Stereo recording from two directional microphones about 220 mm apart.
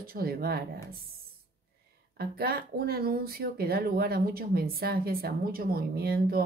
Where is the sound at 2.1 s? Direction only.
45° right (ahead or behind).